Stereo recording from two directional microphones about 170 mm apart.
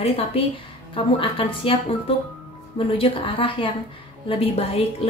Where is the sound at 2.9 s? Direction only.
30° left (ahead or behind).